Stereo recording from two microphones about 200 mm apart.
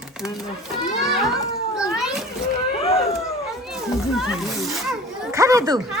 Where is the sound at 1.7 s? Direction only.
5° right (ahead or behind).